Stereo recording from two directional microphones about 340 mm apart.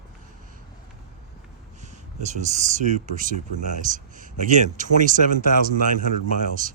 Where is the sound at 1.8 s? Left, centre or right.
Right.